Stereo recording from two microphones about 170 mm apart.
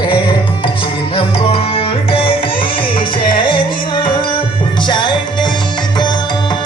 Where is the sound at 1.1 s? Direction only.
35° left (ahead or behind).